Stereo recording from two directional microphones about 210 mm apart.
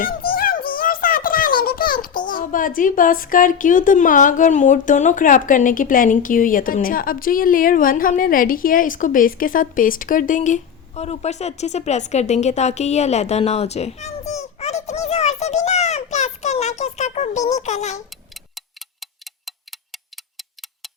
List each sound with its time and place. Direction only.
0.0 s a child's voice: 45° left (ahead or behind)